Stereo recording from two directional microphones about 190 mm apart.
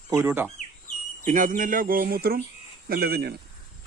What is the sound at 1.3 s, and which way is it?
Speech, 45° right (ahead or behind).